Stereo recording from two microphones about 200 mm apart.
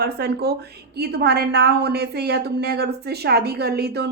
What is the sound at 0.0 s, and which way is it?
A woman's voice, 55° right (ahead or behind).